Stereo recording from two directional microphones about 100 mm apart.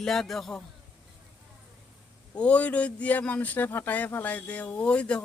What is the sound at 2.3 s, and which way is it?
Speech, 10° left (ahead or behind).